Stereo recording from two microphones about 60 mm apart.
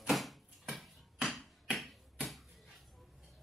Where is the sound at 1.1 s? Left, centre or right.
Centre.